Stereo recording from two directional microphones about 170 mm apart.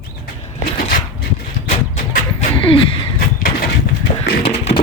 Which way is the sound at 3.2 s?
60° left (ahead or behind).